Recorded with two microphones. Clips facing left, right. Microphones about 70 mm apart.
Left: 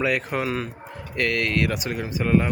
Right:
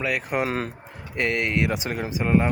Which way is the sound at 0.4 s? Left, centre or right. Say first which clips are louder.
Even; right.